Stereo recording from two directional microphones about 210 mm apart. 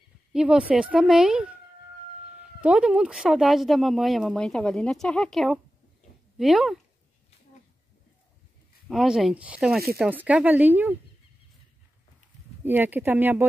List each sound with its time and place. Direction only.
0.3 s speech: 5° right (ahead or behind)
2.6 s speech: 5° right (ahead or behind)
8.8 s speech: 5° right (ahead or behind)
12.6 s speech: 10° right (ahead or behind)